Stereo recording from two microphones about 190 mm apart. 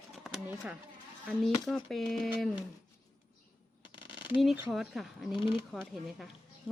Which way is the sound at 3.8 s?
25° left (ahead or behind).